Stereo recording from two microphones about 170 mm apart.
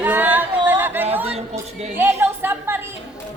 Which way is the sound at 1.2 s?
40° right (ahead or behind).